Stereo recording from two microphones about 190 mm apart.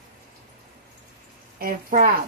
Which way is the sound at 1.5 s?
45° right (ahead or behind).